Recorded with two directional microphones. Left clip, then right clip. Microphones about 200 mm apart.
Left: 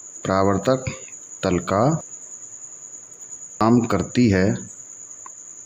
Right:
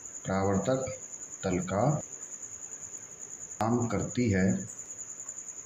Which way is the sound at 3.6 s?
55° left (ahead or behind).